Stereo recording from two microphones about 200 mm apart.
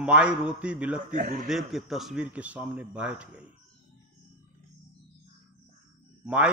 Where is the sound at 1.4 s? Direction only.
Centre (ahead or behind).